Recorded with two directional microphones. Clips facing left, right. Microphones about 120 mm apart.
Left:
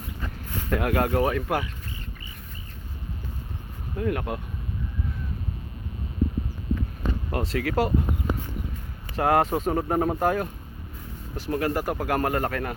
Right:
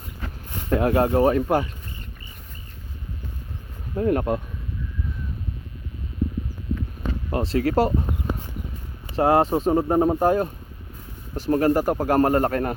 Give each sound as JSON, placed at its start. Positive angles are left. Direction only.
{"t": 0.5, "sound": "speech", "side_deg": -25}
{"t": 3.9, "sound": "speech", "side_deg": -35}
{"t": 7.3, "sound": "speech", "side_deg": -30}
{"t": 9.1, "sound": "speech", "side_deg": -25}